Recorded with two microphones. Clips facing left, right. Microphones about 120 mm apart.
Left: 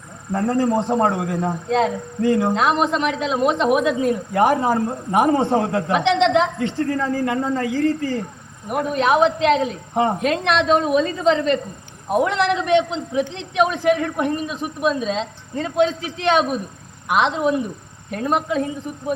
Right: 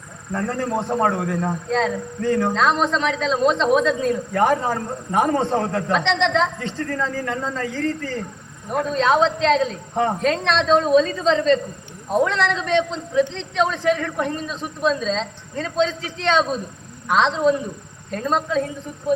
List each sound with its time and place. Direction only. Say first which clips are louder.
0.5 s speech: left 5 dB; 5° left (ahead or behind)